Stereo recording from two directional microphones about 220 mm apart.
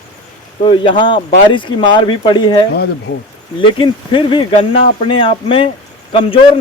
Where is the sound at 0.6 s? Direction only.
20° left (ahead or behind).